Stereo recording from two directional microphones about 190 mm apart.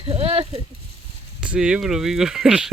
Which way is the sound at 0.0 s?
30° right (ahead or behind).